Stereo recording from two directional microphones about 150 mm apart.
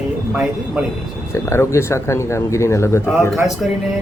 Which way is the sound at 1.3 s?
20° left (ahead or behind).